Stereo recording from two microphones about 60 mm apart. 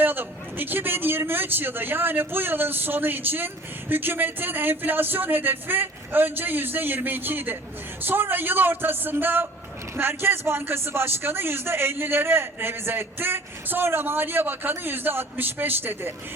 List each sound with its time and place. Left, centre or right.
0.0 s speech: right